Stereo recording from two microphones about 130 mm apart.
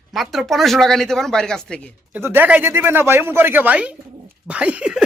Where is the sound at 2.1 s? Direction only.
15° right (ahead or behind).